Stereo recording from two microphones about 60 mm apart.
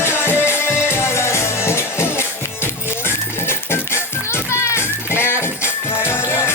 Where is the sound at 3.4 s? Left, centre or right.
Left.